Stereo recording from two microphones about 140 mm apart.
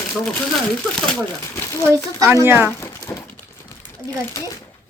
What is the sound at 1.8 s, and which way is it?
Speech, 20° right (ahead or behind).